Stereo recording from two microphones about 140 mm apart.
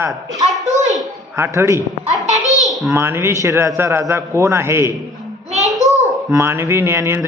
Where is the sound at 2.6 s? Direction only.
Centre (ahead or behind).